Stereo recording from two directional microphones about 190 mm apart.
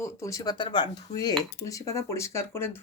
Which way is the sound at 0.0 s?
15° left (ahead or behind).